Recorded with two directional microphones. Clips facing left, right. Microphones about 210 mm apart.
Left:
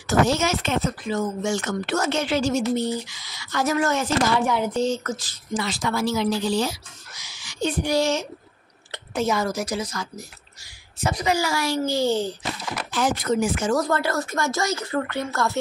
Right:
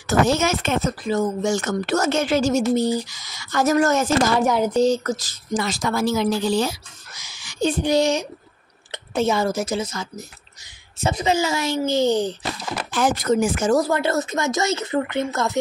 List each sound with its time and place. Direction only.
0.0 s speech: 50° right (ahead or behind)
7.2 s a sound: 50° right (ahead or behind)
7.8 s a woman's voice: 20° right (ahead or behind)
12.9 s speech: 45° right (ahead or behind)
13.7 s a woman's voice: 10° right (ahead or behind)